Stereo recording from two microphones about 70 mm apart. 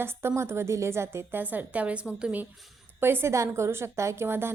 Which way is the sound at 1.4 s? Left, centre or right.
Right.